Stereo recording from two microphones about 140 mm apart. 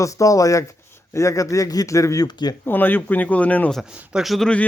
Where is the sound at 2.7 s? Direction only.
15° left (ahead or behind).